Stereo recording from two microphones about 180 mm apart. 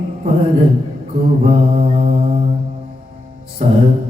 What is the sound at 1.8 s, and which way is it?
Mantra, 35° right (ahead or behind).